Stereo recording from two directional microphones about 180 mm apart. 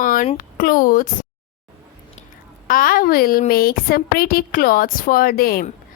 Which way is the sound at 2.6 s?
50° left (ahead or behind).